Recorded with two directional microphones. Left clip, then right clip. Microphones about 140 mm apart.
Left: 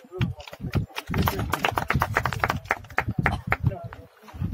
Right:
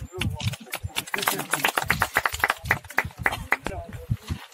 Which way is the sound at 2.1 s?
40° left (ahead or behind).